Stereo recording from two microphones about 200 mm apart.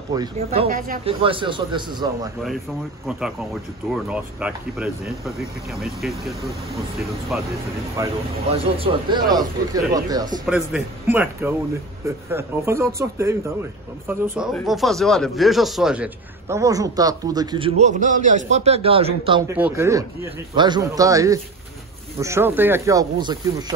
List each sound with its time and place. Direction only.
0.1 s speech: 15° right (ahead or behind)
0.7 s speech: 45° right (ahead or behind)
1.0 s speech: 25° right (ahead or behind)
3.1 s speech: 5° right (ahead or behind)
8.0 s speech: 15° right (ahead or behind)
8.5 s speech: 30° right (ahead or behind)
10.4 s speech: 5° right (ahead or behind); by 19.4 s 25° right (ahead or behind)
19.4 s speech: 10° right (ahead or behind)